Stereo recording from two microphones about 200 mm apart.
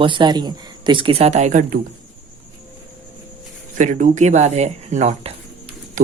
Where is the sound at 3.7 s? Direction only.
40° right (ahead or behind).